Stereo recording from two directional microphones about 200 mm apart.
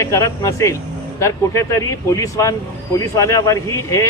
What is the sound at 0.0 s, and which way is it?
Speech, 15° left (ahead or behind).